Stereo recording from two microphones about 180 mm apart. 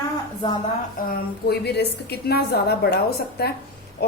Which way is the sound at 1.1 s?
65° left (ahead or behind).